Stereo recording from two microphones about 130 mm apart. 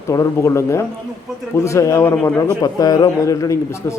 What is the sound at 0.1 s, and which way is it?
A man's voice, 20° left (ahead or behind).